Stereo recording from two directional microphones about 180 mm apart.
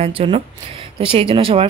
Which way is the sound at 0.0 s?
30° right (ahead or behind).